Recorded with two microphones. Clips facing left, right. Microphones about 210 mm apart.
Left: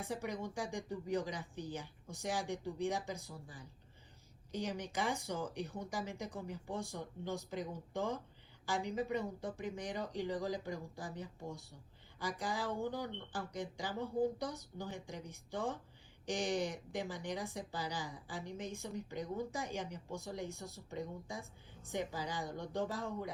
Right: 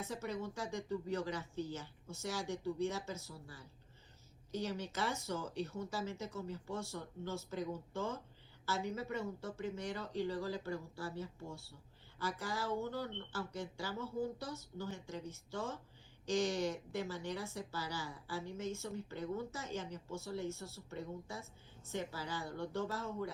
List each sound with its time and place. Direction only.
0.0 s a woman's voice: 15° left (ahead or behind)